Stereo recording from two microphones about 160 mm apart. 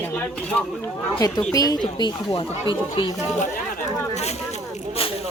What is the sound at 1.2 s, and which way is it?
Speech, 25° left (ahead or behind).